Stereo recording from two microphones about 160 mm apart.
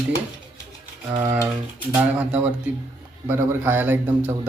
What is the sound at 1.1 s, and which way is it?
A man's voice, 15° right (ahead or behind).